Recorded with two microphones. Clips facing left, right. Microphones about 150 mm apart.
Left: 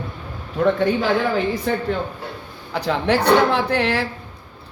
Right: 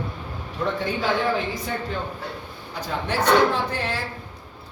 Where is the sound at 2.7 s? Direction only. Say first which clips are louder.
Left 7 dB; 70° left (ahead or behind).